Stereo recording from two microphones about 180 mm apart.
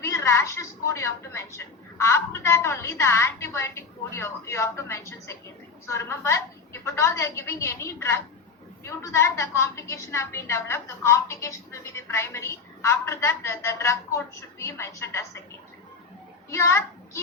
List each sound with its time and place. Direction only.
0.0 s a woman's voice: 15° left (ahead or behind)
16.5 s a woman's voice: 15° left (ahead or behind)